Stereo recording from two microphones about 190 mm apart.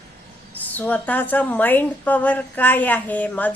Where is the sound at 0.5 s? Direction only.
10° left (ahead or behind).